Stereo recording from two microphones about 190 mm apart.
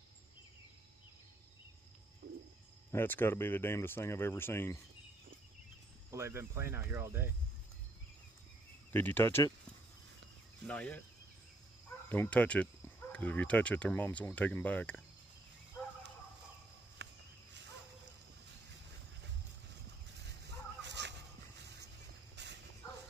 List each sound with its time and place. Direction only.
2.2 s a sound: 55° right (ahead or behind)
2.9 s speech: 10° left (ahead or behind)
6.0 s speech: 15° right (ahead or behind)
8.9 s speech: 10° left (ahead or behind)
10.7 s speech: 5° left (ahead or behind)
12.1 s speech: 10° left (ahead or behind)
20.4 s dog: 65° right (ahead or behind)